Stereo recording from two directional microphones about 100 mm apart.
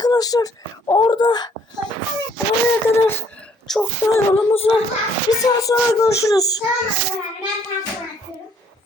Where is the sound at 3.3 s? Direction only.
10° left (ahead or behind).